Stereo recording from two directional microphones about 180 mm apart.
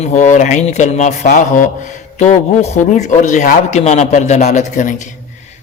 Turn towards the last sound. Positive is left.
turn(degrees=40)  # may be behind; listen again after turning